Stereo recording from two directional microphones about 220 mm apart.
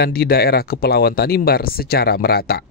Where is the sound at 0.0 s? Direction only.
45° left (ahead or behind).